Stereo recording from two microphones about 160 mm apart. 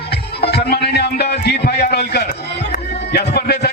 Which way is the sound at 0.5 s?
85° left.